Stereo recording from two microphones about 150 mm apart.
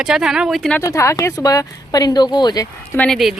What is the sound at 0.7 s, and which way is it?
Speech, 20° left (ahead or behind).